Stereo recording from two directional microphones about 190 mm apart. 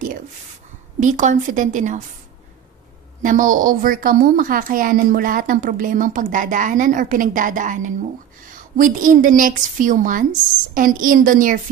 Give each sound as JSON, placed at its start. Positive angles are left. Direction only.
{"t": 0.9, "sound": "a woman's voice", "side_deg": -40}
{"t": 3.2, "sound": "a woman's voice", "side_deg": -45}